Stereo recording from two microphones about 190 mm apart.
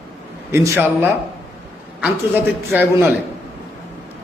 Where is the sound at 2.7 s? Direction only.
10° right (ahead or behind).